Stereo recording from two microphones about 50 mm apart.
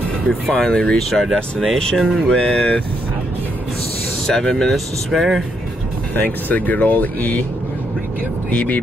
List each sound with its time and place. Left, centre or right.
0.3 s speech: centre
4.3 s speech: centre
6.1 s speech: left
8.5 s speech: left